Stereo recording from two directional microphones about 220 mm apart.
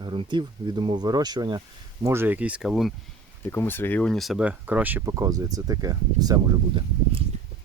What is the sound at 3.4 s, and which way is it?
Speech, 10° left (ahead or behind).